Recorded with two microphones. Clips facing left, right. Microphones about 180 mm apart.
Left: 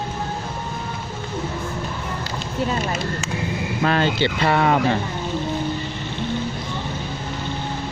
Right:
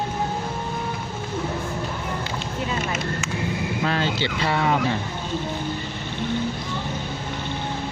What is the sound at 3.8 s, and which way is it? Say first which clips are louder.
Speech: left 6 dB; 60° left (ahead or behind).